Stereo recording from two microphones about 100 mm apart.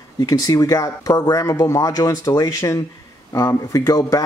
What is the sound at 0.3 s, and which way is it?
Speech, 35° left (ahead or behind).